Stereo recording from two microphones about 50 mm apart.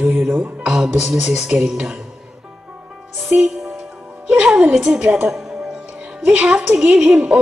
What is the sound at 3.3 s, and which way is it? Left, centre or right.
Speech, right.